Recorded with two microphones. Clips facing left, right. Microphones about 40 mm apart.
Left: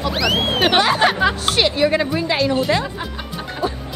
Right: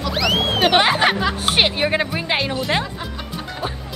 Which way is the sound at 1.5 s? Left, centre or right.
Right.